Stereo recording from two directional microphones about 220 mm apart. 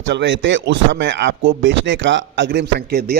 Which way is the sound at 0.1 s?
55° right (ahead or behind).